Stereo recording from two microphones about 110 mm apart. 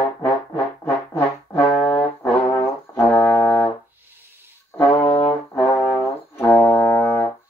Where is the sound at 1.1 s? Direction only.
25° left (ahead or behind).